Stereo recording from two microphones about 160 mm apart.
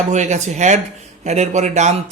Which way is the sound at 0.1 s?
45° right (ahead or behind).